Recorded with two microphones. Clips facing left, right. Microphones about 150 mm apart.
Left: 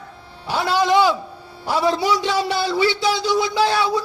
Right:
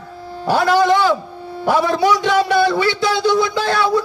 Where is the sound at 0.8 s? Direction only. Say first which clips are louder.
Right 2 dB; 15° left (ahead or behind).